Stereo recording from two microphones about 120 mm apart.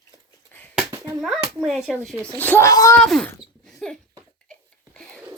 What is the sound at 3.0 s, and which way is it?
Speech, 5° left (ahead or behind).